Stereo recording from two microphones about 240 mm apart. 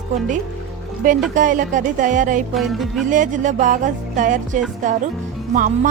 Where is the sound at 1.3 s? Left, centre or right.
Right.